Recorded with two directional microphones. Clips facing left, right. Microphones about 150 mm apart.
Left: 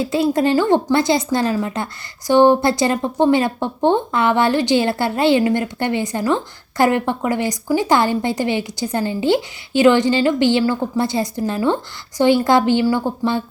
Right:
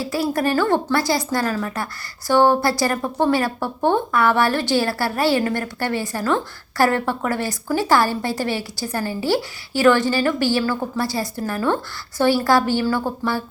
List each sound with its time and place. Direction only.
0.0 s a woman's voice: 20° left (ahead or behind)